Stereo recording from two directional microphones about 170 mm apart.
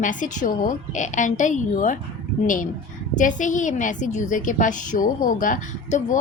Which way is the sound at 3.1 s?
50° left (ahead or behind).